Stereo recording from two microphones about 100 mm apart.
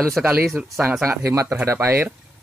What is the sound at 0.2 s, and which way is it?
Speech, 20° right (ahead or behind).